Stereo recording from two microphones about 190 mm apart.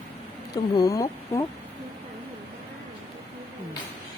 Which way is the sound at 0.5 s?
20° left (ahead or behind).